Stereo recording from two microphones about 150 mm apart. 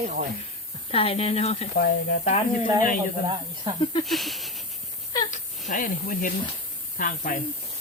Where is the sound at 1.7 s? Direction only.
90° left.